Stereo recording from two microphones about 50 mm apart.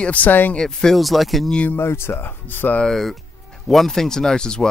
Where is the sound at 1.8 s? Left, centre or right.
Left.